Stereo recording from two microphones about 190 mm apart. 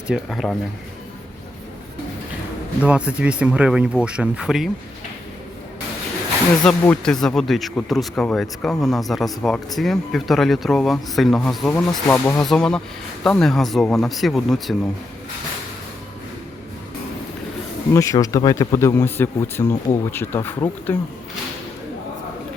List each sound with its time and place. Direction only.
0.1 s speech: centre (ahead or behind)
2.8 s speech: 5° right (ahead or behind)
6.7 s speech: 5° left (ahead or behind)
11.7 s speech: 15° left (ahead or behind)
17.9 s speech: 15° left (ahead or behind)